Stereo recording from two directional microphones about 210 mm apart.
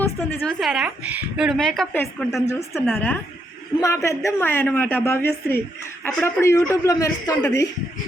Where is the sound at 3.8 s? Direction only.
15° left (ahead or behind).